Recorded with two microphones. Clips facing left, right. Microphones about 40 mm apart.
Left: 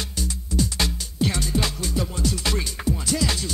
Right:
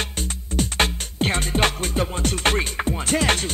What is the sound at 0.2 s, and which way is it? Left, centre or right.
Music, right.